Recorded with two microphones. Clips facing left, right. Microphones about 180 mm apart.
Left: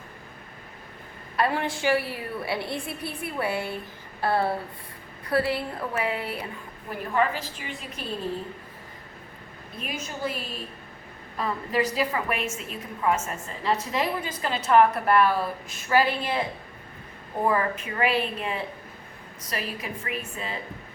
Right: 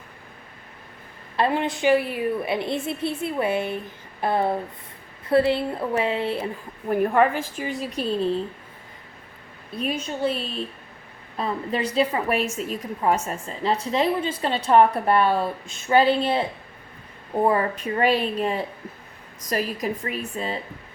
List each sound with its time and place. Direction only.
1.4 s a woman's voice: 20° right (ahead or behind)
4.2 s a sound: 20° right (ahead or behind)
5.3 s a woman's voice: 25° right (ahead or behind)
6.9 s a woman's voice: 55° right (ahead or behind); by 8.0 s 40° right (ahead or behind)
9.7 s a woman's voice: 30° right (ahead or behind)